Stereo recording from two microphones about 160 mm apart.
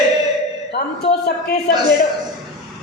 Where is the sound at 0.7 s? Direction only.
90° left.